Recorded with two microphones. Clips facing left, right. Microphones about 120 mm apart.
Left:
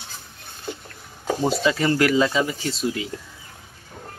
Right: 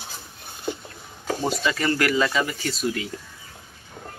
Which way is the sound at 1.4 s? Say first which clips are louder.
Left 4 dB; 25° left (ahead or behind).